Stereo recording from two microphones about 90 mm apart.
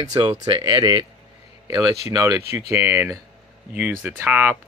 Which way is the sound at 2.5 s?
30° right (ahead or behind).